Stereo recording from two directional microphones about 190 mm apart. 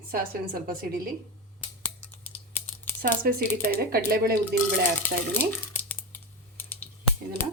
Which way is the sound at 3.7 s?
50° right (ahead or behind).